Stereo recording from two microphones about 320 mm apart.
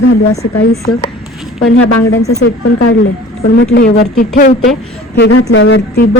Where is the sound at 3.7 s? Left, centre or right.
Left.